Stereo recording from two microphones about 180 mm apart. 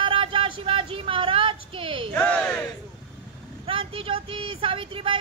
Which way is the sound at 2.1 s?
10° left (ahead or behind).